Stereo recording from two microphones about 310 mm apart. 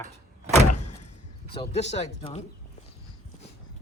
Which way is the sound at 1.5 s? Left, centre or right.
Centre.